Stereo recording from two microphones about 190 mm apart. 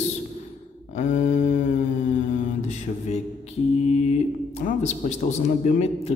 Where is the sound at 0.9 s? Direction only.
45° left (ahead or behind).